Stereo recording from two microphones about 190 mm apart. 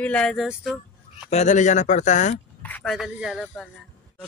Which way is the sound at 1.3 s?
40° left (ahead or behind).